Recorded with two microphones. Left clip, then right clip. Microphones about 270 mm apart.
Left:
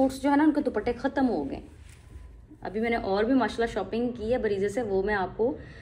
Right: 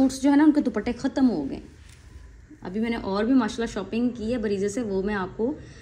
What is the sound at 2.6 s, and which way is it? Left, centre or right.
A woman's voice, right.